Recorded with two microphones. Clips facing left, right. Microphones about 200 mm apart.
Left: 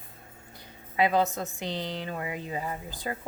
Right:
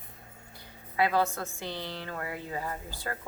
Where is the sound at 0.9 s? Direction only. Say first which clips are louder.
Left 2 dB; 20° left (ahead or behind).